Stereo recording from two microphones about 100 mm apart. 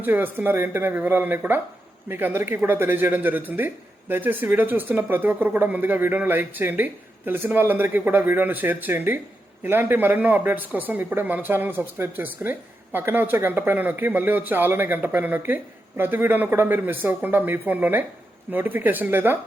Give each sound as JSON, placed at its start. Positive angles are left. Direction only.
{"t": 0.0, "sound": "speech", "side_deg": -20}